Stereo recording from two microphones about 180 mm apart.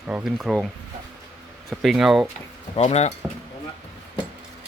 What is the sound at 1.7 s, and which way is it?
Speech, 5° right (ahead or behind).